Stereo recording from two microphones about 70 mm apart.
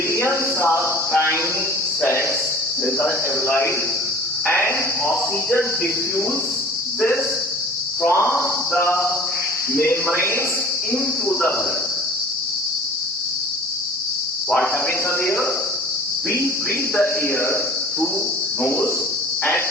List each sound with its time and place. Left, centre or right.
0.1 s a sound: left
2.0 s speech: left
8.0 s speech: left
15.2 s speech: left
16.9 s speech: left